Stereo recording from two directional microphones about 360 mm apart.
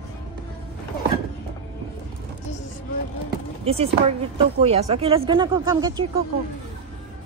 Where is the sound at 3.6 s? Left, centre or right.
Centre.